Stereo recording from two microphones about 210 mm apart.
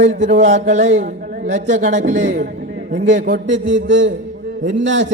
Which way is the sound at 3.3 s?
60° right (ahead or behind).